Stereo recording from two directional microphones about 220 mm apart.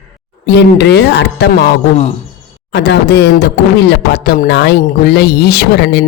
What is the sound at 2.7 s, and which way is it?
Speech, 50° left (ahead or behind).